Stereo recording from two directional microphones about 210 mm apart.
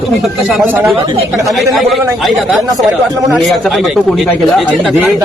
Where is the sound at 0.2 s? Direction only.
5° right (ahead or behind).